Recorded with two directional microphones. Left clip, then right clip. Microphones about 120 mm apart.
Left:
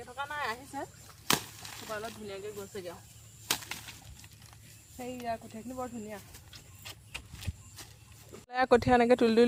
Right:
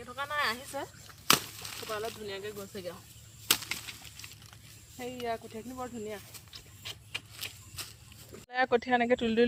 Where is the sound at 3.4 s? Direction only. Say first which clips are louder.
Right 4 dB; 20° right (ahead or behind).